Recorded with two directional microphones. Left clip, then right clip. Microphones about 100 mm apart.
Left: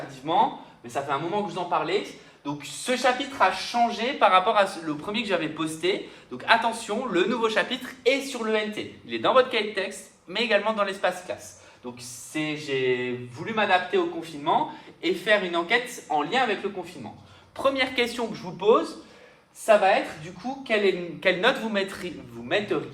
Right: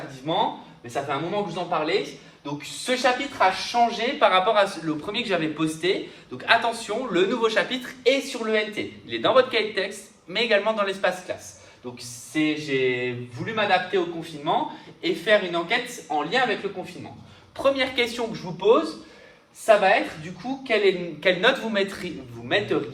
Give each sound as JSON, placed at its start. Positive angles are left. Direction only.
{"t": 0.3, "sound": "a man's voice", "side_deg": 55}
{"t": 0.9, "sound": "a woman's voice", "side_deg": 35}
{"t": 4.2, "sound": "a man's voice", "side_deg": 45}
{"t": 8.3, "sound": "a man's voice", "side_deg": 35}
{"t": 12.3, "sound": "a woman's voice", "side_deg": 30}
{"t": 14.5, "sound": "speech", "side_deg": 60}
{"t": 16.1, "sound": "a woman's voice", "side_deg": 40}
{"t": 17.6, "sound": "speech", "side_deg": 55}
{"t": 19.6, "sound": "a woman's voice", "side_deg": 30}